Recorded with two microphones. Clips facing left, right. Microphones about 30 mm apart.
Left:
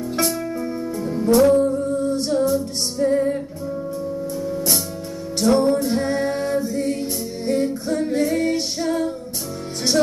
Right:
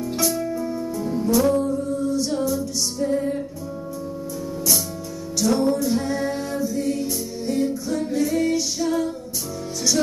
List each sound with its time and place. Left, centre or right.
0.1 s music: left
2.0 s music: left
3.0 s music: centre
5.4 s music: left
8.1 s female singing: left